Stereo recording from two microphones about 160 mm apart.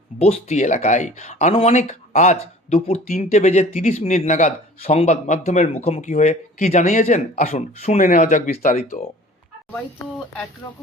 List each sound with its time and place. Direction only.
0.2 s speech: 40° left (ahead or behind)